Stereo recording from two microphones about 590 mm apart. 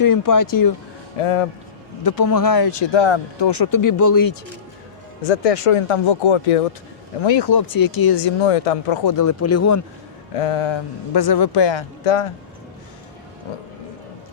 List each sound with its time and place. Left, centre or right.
0.0 s speech: left
1.2 s speech: left
2.0 s speech: left
5.2 s speech: left
7.2 s speech: left
8.4 s speech: left
9.0 s speech: left
10.3 s a man's voice: left